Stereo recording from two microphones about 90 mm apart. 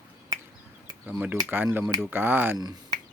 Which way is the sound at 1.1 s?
20° right (ahead or behind).